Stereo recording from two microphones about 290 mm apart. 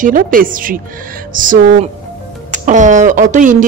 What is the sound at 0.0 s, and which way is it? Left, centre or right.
Speech, right.